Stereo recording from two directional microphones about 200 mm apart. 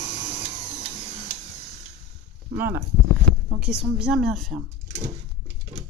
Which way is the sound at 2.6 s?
10° right (ahead or behind).